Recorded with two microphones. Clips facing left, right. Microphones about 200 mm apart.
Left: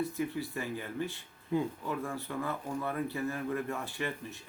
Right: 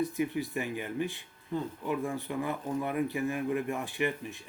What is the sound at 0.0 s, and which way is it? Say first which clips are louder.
A man's voice: right 3 dB; 15° right (ahead or behind).